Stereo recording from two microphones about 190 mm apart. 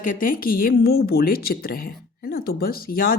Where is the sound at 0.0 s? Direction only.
45° left (ahead or behind).